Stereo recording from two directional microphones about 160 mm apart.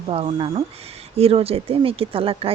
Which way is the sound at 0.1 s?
40° right (ahead or behind).